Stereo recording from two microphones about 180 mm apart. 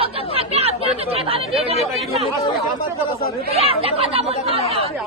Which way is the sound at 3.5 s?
35° right (ahead or behind).